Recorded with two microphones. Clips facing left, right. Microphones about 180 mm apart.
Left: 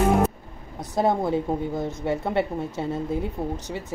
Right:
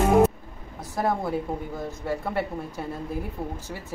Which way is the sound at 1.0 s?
20° left (ahead or behind).